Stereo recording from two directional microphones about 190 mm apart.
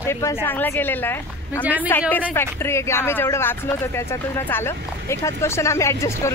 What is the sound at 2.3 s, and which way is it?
Speech, 15° left (ahead or behind).